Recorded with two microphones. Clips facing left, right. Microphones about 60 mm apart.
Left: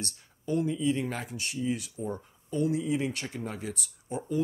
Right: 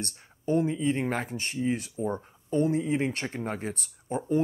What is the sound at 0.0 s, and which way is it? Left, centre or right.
Speech, right.